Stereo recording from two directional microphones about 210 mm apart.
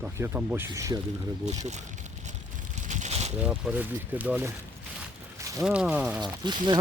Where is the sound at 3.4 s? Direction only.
5° right (ahead or behind).